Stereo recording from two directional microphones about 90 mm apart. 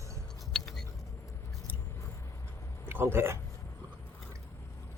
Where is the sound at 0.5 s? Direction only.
5° left (ahead or behind).